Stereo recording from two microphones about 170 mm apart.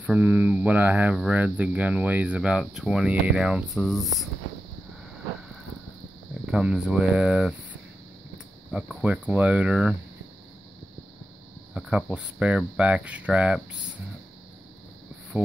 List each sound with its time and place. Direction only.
0.0 s speech: 10° right (ahead or behind)
6.4 s speech: 5° right (ahead or behind)
8.7 s speech: 5° right (ahead or behind)
11.7 s speech: 5° right (ahead or behind)